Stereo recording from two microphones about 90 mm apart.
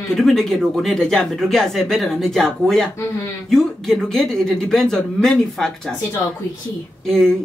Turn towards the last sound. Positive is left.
turn(degrees=5)  # may be behind; listen again after turning